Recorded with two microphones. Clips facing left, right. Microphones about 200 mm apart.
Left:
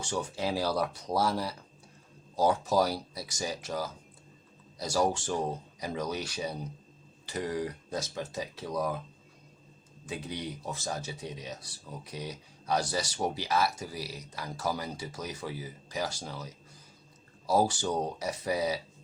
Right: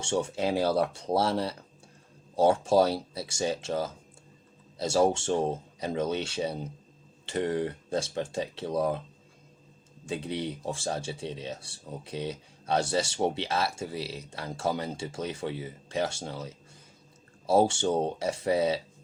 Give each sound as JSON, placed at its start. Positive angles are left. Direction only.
{"t": 0.0, "sound": "speech", "side_deg": -25}
{"t": 10.1, "sound": "speech", "side_deg": -30}